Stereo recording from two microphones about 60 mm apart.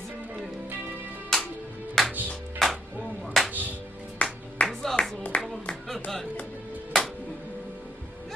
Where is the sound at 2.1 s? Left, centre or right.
Right.